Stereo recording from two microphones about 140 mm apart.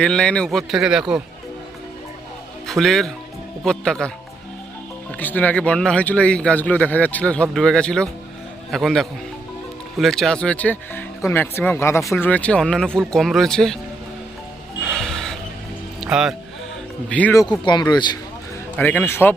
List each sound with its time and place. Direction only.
0.0 s speech: 5° left (ahead or behind)
2.6 s speech: 5° left (ahead or behind)
5.1 s speech: 10° left (ahead or behind)
14.8 s music: 5° left (ahead or behind)
17.1 s speech: 10° left (ahead or behind)
17.7 s speech: 30° left (ahead or behind)
18.8 s speech: 10° left (ahead or behind)